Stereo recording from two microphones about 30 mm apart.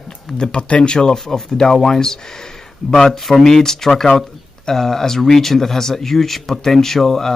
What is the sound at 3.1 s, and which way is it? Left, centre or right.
Speech, centre.